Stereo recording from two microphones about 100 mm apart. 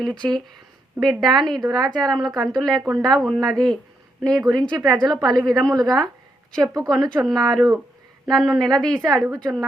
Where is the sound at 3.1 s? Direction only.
Centre (ahead or behind).